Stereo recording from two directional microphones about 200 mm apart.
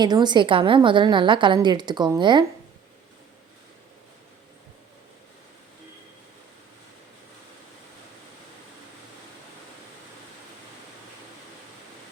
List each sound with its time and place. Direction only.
0.0 s a woman's voice: 20° right (ahead or behind)